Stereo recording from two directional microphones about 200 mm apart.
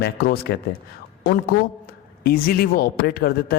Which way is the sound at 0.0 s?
50° left (ahead or behind).